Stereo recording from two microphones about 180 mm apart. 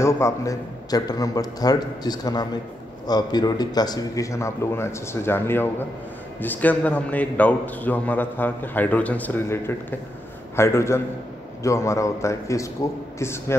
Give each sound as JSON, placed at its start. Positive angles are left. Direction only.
{"t": 0.0, "sound": "a man's voice", "side_deg": 15}